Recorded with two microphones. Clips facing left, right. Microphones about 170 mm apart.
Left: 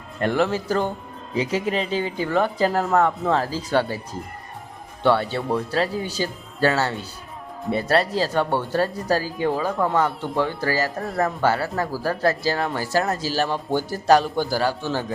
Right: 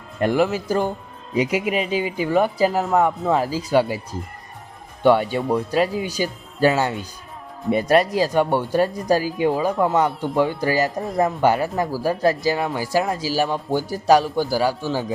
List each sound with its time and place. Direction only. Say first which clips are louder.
0.2 s speech: right 2 dB; 10° right (ahead or behind)
5.0 s speech: right 3 dB; 15° right (ahead or behind)